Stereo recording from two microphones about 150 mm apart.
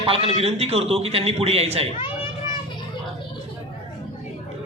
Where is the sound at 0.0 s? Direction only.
40° right (ahead or behind).